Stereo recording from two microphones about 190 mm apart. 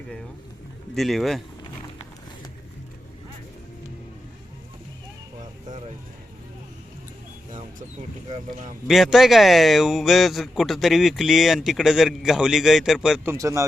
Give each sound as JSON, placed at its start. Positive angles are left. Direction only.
{"t": 0.9, "sound": "speech", "side_deg": 0}
{"t": 8.3, "sound": "speech", "side_deg": -40}
{"t": 8.9, "sound": "speech", "side_deg": 0}
{"t": 13.3, "sound": "speech", "side_deg": -15}